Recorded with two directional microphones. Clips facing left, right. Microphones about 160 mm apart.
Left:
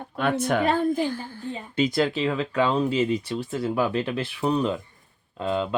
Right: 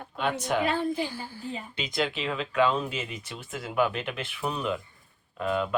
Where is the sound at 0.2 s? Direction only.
55° left (ahead or behind).